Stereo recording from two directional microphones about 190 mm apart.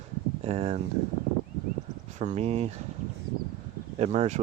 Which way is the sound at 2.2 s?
35° right (ahead or behind).